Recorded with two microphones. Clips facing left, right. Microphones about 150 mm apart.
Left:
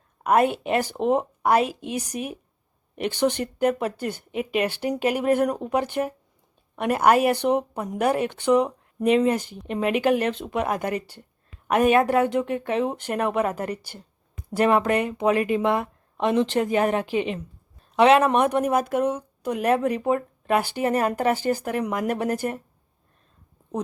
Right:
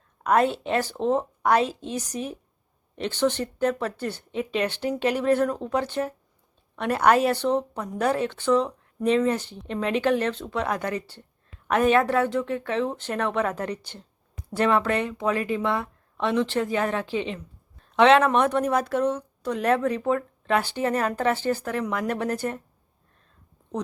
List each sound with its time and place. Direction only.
0.2 s speech: 10° left (ahead or behind)